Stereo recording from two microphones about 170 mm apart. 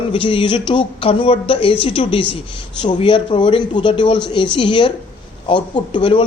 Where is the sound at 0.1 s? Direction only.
30° left (ahead or behind).